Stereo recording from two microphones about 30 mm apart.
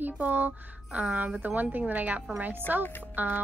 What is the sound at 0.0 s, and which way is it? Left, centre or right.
Speech, right.